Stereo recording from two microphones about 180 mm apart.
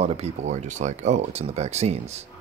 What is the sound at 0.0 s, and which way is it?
Speech, 35° right (ahead or behind).